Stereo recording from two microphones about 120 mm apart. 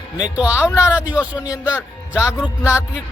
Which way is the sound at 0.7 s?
25° left (ahead or behind).